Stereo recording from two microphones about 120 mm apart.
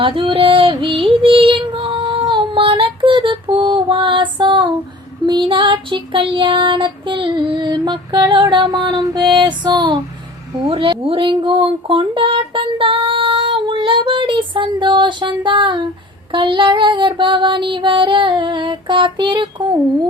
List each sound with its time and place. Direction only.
0.0 s female singing: 45° right (ahead or behind)
5.2 s child singing: 40° right (ahead or behind)
10.7 s speech: 45° right (ahead or behind)